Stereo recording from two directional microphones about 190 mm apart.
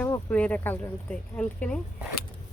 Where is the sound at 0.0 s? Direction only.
5° left (ahead or behind).